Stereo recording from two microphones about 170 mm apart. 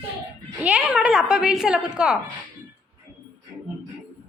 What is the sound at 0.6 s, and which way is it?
A woman's voice, 5° right (ahead or behind).